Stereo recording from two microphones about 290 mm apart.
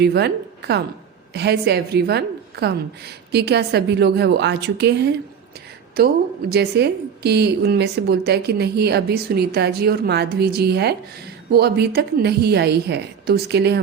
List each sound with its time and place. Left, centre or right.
0.0 s a woman's voice: right